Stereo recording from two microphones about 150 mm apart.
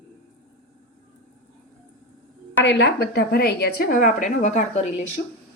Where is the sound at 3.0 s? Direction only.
90° left; by 5.0 s 50° left (ahead or behind).